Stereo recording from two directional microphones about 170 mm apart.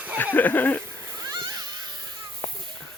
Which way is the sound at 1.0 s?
20° right (ahead or behind).